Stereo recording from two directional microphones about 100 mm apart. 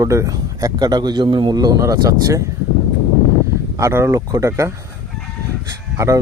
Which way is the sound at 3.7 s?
30° right (ahead or behind).